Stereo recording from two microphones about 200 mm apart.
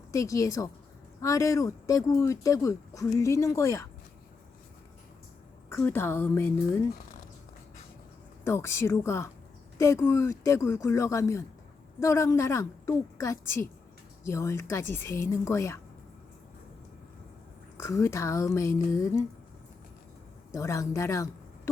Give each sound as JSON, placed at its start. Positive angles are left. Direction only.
{"t": 0.1, "sound": "speech", "side_deg": 15}
{"t": 5.6, "sound": "speech", "side_deg": 10}
{"t": 8.4, "sound": "speech", "side_deg": 15}
{"t": 17.7, "sound": "speech", "side_deg": 15}
{"t": 20.5, "sound": "speech", "side_deg": 15}